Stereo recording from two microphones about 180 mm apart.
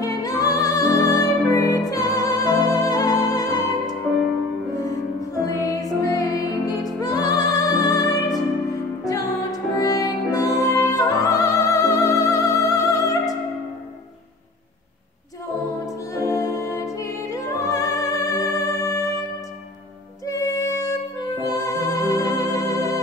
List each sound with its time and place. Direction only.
0.0 s music: 20° left (ahead or behind)
15.8 s music: 20° left (ahead or behind)
20.2 s music: 20° left (ahead or behind)